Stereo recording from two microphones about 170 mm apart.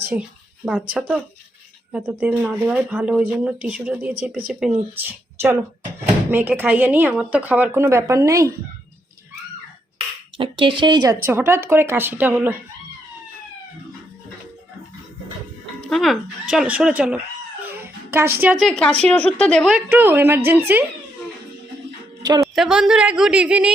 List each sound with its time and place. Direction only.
0.1 s speech: 5° right (ahead or behind)
10.3 s speech: 30° right (ahead or behind); by 12.5 s 10° right (ahead or behind)
15.8 s speech: centre (ahead or behind)
17.6 s a sound: 10° right (ahead or behind)
18.5 s speech: 5° left (ahead or behind)
19.7 s speech: 10° right (ahead or behind)
22.5 s speech: 5° right (ahead or behind)